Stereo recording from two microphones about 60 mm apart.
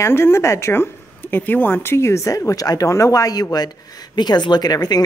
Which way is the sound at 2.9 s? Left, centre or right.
Left.